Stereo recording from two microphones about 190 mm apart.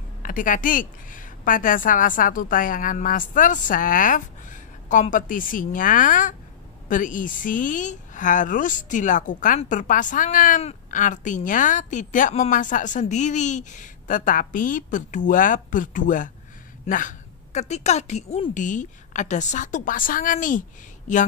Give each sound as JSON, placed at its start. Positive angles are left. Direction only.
{"t": 0.2, "sound": "a woman's voice", "side_deg": 45}